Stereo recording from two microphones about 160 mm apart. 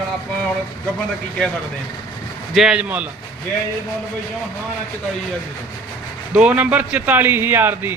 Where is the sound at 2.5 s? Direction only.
5° right (ahead or behind).